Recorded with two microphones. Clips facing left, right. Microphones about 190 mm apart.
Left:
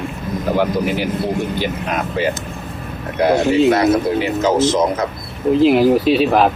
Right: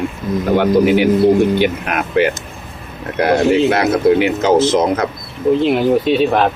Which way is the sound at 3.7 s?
65° right (ahead or behind).